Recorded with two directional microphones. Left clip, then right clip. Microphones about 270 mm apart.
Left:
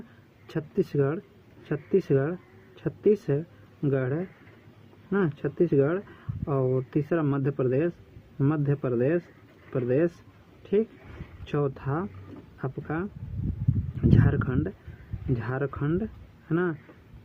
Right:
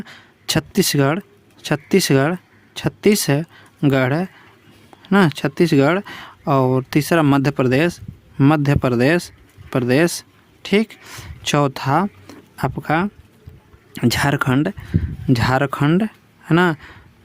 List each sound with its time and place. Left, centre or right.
0.8 s a woman's voice: right